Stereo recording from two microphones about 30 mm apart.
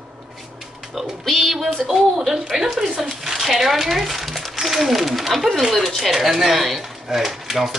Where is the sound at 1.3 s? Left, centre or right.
Centre.